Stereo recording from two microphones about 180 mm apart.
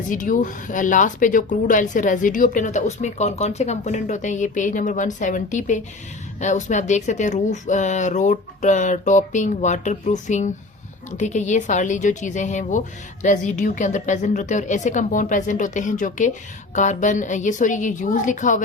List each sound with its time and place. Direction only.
0.1 s speech: 45° left (ahead or behind)